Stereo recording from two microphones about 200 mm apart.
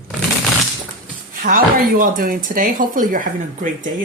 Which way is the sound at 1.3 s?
45° right (ahead or behind).